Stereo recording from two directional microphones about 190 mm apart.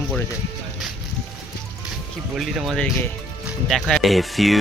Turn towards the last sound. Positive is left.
turn(degrees=0)  # may be behind; listen again after turning